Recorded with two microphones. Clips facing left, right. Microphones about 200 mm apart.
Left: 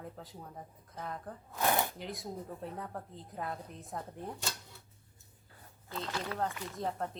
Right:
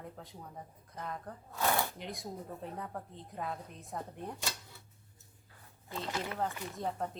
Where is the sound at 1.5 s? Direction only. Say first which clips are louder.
Left 1 dB; 20° left (ahead or behind).